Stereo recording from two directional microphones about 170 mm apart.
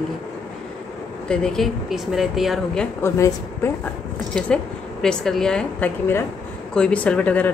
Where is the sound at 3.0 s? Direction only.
15° left (ahead or behind).